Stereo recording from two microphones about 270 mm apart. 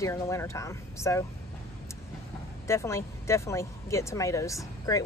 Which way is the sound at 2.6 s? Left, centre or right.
Centre.